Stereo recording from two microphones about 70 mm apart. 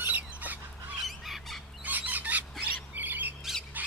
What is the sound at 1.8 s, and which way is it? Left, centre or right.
Bird, right.